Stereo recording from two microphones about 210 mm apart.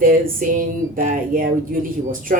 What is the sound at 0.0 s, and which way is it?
A woman's voice, 40° right (ahead or behind).